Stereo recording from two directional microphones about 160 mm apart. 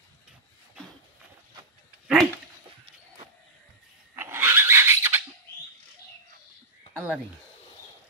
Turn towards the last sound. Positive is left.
turn(degrees=-10)  # may be behind; listen again after turning